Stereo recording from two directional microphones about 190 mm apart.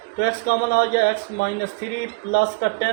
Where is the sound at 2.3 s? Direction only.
60° left (ahead or behind).